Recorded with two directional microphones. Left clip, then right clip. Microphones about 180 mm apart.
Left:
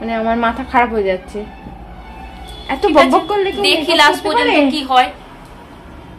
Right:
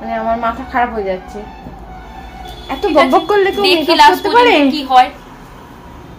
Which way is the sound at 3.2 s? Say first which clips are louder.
Right 4 dB; 25° right (ahead or behind).